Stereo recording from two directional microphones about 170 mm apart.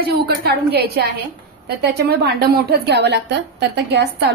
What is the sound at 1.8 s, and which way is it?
A woman's voice, 70° right (ahead or behind).